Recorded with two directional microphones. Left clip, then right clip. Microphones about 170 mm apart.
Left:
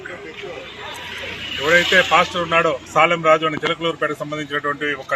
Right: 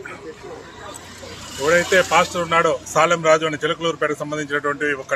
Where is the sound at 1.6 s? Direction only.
30° right (ahead or behind).